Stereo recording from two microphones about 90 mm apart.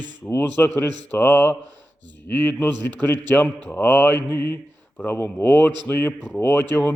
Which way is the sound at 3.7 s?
20° left (ahead or behind).